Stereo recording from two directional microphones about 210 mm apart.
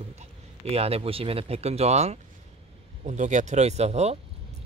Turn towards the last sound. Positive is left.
turn(degrees=-30)  # may be behind; listen again after turning